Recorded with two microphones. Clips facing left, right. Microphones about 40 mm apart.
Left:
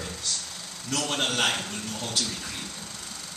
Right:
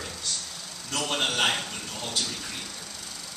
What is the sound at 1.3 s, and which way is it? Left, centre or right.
Speech, centre.